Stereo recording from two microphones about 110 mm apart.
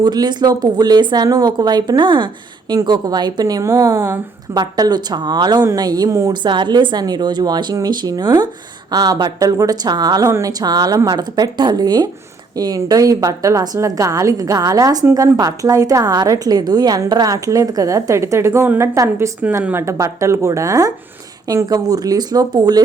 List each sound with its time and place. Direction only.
0.0 s a woman's voice: 40° right (ahead or behind); by 4.2 s 25° right (ahead or behind)
4.5 s a woman's voice: 40° right (ahead or behind)
6.3 s a woman's voice: 45° right (ahead or behind)